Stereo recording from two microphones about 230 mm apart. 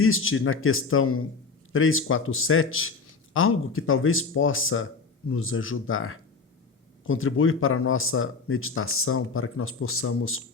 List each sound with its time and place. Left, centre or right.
0.0 s speech: left